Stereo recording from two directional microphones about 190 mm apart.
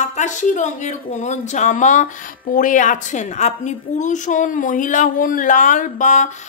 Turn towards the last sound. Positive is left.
turn(degrees=40)  # may be behind; listen again after turning